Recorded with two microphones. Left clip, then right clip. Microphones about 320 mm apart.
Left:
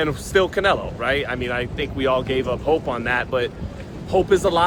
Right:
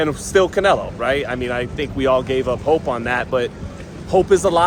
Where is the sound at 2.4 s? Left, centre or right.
Right.